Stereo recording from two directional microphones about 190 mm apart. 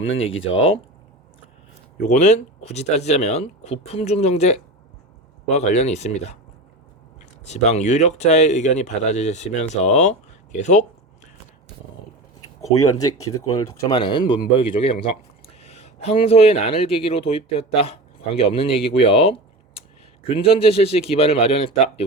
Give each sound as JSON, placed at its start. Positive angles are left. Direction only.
{"t": 0.0, "sound": "speech", "side_deg": 90}
{"t": 2.0, "sound": "speech", "side_deg": 40}
{"t": 7.4, "sound": "speech", "side_deg": 35}
{"t": 12.6, "sound": "speech", "side_deg": 15}